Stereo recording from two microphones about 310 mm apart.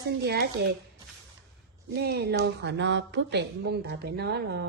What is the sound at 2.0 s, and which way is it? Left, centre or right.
A woman's voice, right.